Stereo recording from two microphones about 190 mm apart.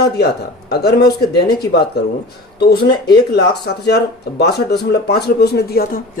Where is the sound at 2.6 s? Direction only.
60° left (ahead or behind).